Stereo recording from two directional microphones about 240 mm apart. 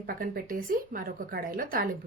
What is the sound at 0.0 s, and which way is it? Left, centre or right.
A woman's voice, right.